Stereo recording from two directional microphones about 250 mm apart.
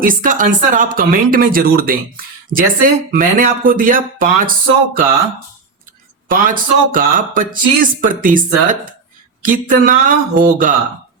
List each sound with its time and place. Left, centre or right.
0.0 s speech: right
6.2 s speech: right